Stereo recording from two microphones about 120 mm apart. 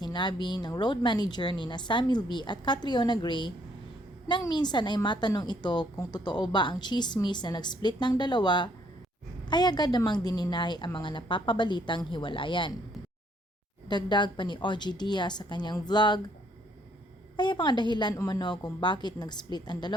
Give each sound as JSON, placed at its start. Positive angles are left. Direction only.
{"t": 0.0, "sound": "a woman's voice", "side_deg": 40}
{"t": 13.8, "sound": "a woman's voice", "side_deg": 40}
{"t": 17.3, "sound": "a woman's voice", "side_deg": 40}